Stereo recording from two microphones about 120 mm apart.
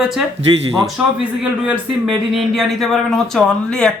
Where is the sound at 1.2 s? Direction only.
10° right (ahead or behind).